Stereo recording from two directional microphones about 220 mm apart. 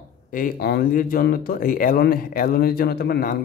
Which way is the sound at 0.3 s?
40° left (ahead or behind).